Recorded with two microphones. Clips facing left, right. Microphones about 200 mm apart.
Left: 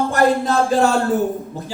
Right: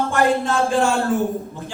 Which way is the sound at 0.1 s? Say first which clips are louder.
Left 1 dB; 40° left (ahead or behind).